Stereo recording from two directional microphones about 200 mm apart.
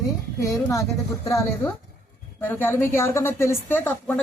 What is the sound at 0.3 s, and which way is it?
A woman's voice, 15° left (ahead or behind).